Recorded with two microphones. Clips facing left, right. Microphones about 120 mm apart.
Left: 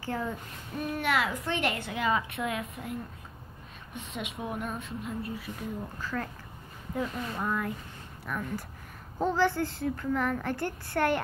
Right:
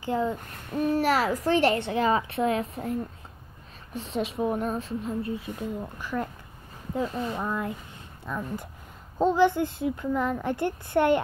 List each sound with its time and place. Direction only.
0.0 s speech: 20° right (ahead or behind)
0.8 s a woman's voice: 35° right (ahead or behind)